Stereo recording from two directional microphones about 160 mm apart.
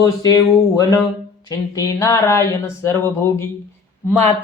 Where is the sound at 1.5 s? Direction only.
20° left (ahead or behind).